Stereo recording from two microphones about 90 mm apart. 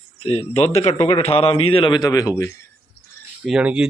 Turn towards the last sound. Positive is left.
turn(degrees=-15)  # may be behind; listen again after turning